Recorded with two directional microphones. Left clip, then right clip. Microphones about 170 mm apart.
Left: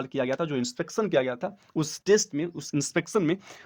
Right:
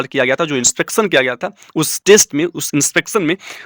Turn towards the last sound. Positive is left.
turn(degrees=-15)  # may be behind; listen again after turning